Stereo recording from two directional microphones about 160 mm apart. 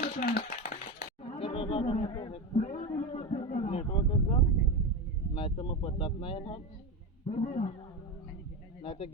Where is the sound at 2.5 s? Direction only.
45° left (ahead or behind).